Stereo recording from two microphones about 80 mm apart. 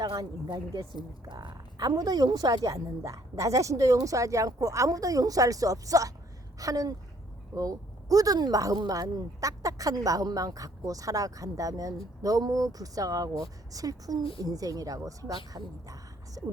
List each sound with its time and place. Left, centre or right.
0.4 s speech: right
1.3 s a woman's voice: right